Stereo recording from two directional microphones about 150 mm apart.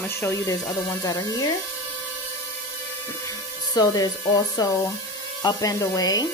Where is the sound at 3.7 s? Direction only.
25° left (ahead or behind).